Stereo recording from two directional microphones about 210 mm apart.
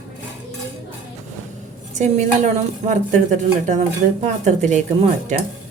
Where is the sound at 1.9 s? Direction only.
35° right (ahead or behind).